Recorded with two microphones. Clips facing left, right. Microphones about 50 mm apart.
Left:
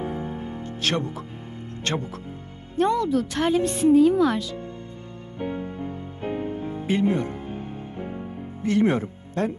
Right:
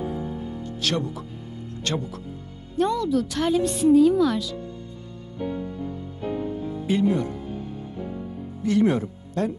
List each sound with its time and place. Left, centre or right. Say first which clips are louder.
0.0 s music: even; left
1.9 s a woman's voice: even; left
5.4 s music: even; left